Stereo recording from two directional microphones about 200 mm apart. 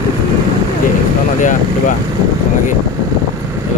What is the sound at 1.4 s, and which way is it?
Speech, 40° left (ahead or behind).